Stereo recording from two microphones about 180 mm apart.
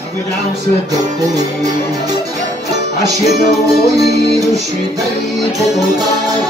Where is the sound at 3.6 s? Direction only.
20° right (ahead or behind).